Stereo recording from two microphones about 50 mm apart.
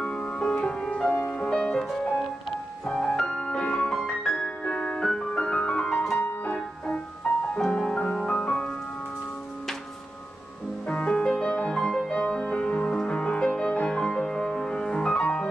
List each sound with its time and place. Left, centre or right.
0.0 s music: centre
1.8 s music: centre
10.9 s music: centre